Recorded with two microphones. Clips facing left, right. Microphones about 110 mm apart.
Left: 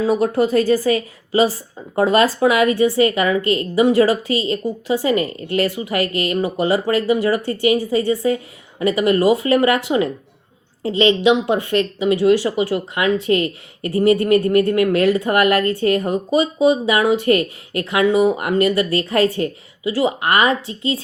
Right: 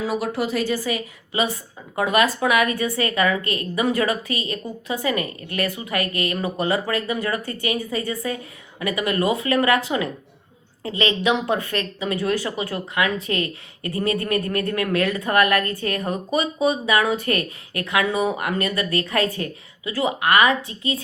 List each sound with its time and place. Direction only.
0.1 s a woman's voice: 45° left (ahead or behind); by 9.8 s 25° left (ahead or behind)
10.8 s speech: 25° left (ahead or behind)